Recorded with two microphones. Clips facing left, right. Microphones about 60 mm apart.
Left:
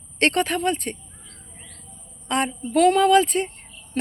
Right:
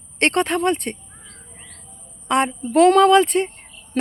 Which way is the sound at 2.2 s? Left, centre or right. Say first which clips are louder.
Right 5 dB; right.